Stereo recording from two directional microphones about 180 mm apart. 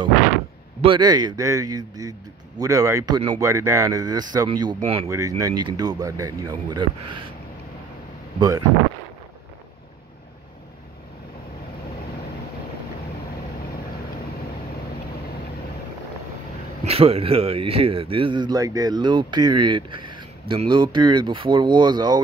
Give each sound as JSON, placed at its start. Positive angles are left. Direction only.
{"t": 0.7, "sound": "speech", "side_deg": -25}
{"t": 5.0, "sound": "speech", "side_deg": -20}
{"t": 8.4, "sound": "speech", "side_deg": -20}
{"t": 16.8, "sound": "speech", "side_deg": -35}